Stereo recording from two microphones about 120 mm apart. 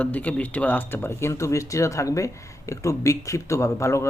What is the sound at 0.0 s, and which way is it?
Speech, 15° left (ahead or behind).